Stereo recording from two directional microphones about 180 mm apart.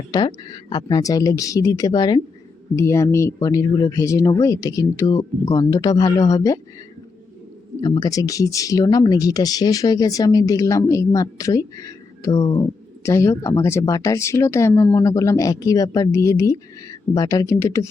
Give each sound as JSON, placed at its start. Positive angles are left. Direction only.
{"t": 0.1, "sound": "speech", "side_deg": 20}
{"t": 7.8, "sound": "speech", "side_deg": 20}